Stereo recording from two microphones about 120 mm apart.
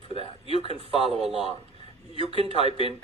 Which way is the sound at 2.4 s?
60° right (ahead or behind).